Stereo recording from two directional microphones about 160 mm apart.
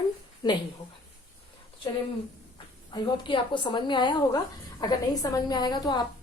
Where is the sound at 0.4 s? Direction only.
25° left (ahead or behind).